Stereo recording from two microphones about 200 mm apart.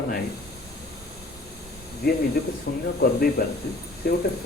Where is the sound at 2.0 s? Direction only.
50° left (ahead or behind).